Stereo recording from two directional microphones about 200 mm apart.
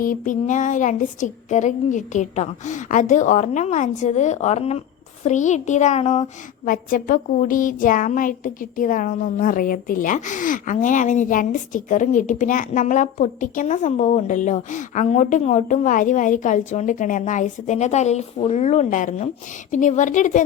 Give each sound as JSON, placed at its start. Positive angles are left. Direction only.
{"t": 0.0, "sound": "a woman's voice", "side_deg": 40}